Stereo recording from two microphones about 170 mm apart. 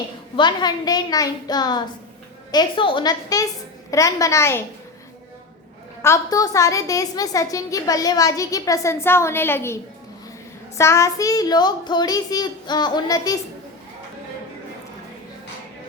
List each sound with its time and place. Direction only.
0.3 s a woman's voice: 25° left (ahead or behind)
6.0 s a woman's voice: 20° left (ahead or behind)